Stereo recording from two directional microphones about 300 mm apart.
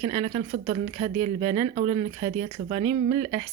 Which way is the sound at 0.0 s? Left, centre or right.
Centre.